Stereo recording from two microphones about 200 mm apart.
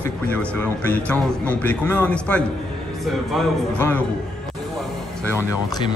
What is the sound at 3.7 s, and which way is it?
Speech, 10° left (ahead or behind).